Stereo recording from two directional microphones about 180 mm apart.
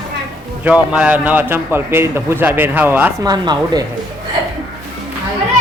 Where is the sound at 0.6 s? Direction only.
5° right (ahead or behind).